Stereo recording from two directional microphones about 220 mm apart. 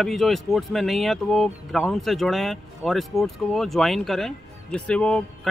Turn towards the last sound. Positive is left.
turn(degrees=5)  # may be behind; listen again after turning